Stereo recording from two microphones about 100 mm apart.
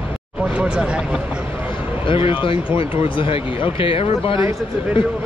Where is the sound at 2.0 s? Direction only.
60° left (ahead or behind).